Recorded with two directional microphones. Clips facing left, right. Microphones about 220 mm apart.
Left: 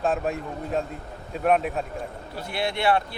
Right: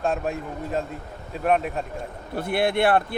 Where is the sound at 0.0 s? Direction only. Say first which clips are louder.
Even; centre (ahead or behind).